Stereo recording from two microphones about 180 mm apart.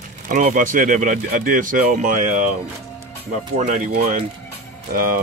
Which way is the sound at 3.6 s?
45° right (ahead or behind).